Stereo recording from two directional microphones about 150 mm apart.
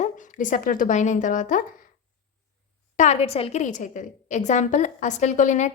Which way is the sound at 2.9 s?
50° left (ahead or behind).